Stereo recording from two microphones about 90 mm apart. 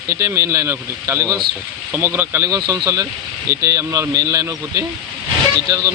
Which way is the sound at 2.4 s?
40° right (ahead or behind).